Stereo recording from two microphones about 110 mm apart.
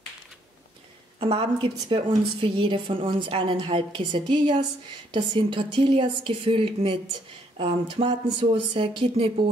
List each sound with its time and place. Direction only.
1.2 s a woman's voice: 55° right (ahead or behind)